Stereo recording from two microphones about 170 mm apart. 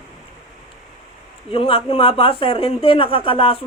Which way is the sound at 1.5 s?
35° left (ahead or behind).